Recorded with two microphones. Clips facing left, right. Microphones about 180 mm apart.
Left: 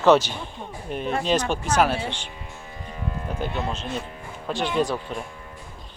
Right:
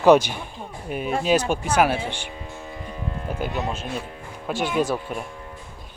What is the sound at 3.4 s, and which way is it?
Speech, 10° right (ahead or behind).